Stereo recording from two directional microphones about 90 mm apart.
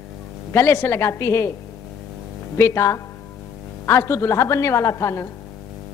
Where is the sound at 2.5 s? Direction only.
30° left (ahead or behind).